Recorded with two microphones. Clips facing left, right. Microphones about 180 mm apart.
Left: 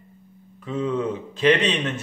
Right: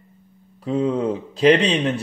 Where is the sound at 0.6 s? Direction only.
35° right (ahead or behind).